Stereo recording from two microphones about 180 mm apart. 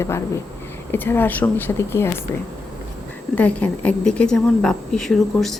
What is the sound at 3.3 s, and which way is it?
A woman's voice, 10° left (ahead or behind).